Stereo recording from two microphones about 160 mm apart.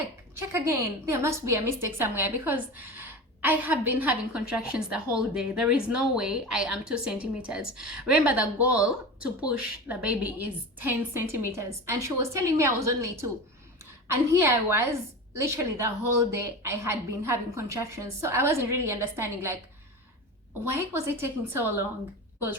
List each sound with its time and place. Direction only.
0.3 s speech: 20° right (ahead or behind)
20.9 s speech: 15° right (ahead or behind)